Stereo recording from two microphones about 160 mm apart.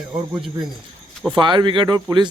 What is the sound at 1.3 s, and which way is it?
Speech, 30° right (ahead or behind).